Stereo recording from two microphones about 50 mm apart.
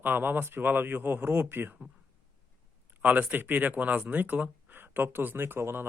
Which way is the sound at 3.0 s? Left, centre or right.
Right.